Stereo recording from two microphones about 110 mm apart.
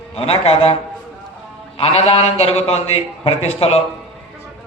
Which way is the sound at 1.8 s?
65° left (ahead or behind).